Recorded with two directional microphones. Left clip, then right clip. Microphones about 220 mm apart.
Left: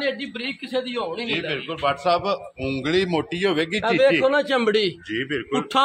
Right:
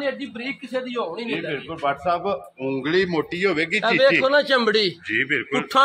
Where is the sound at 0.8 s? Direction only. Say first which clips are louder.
Even; 15° left (ahead or behind).